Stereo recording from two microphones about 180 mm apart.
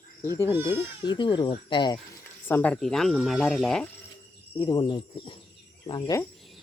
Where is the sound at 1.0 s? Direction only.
25° left (ahead or behind).